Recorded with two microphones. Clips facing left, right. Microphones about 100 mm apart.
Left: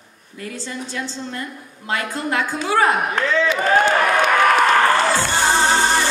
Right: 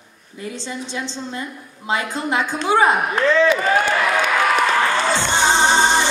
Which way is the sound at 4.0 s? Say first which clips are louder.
Left 2 dB; 50° left (ahead or behind).